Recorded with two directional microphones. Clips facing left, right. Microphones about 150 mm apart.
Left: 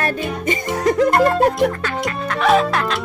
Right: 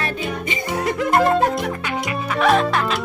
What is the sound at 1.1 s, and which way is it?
Music, centre (ahead or behind).